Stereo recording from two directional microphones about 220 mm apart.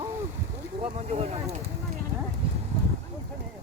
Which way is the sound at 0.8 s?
30° right (ahead or behind).